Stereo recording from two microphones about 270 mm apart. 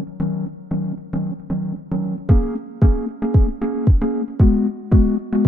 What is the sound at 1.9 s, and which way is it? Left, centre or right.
Music, centre.